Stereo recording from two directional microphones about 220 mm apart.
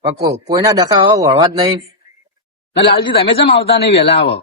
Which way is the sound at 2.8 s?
25° left (ahead or behind).